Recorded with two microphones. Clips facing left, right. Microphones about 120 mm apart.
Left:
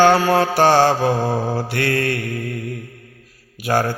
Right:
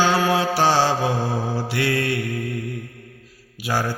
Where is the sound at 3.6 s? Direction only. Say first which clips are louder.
Left 5 dB; 50° left (ahead or behind).